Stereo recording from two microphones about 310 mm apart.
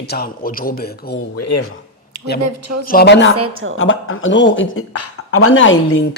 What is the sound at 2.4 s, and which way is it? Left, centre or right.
Speech, right.